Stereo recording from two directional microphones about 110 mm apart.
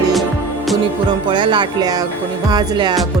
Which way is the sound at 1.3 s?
45° right (ahead or behind).